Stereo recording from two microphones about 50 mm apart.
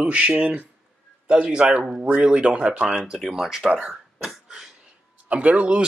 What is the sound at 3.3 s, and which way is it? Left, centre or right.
Speech, centre.